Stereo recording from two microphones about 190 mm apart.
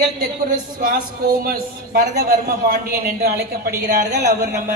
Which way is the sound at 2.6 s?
50° right (ahead or behind).